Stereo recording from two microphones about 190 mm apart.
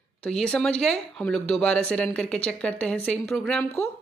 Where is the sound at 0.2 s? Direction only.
5° left (ahead or behind).